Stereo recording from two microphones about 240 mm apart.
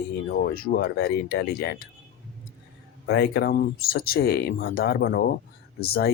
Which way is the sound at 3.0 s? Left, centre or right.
Left.